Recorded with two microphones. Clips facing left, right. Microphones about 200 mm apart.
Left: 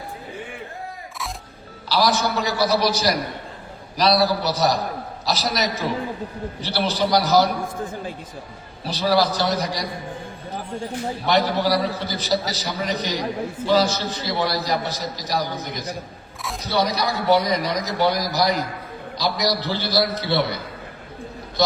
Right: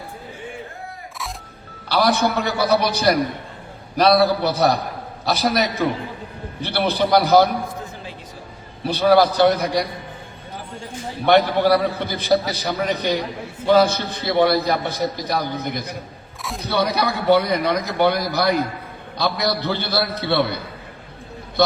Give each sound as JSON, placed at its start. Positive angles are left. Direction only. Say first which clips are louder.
{"t": 1.9, "sound": "a man's voice", "louder": "right 2 dB", "side_deg": -60}
{"t": 8.9, "sound": "a man's voice", "louder": "right 5 dB", "side_deg": -55}
{"t": 11.3, "sound": "a man's voice", "louder": "right 5 dB", "side_deg": -55}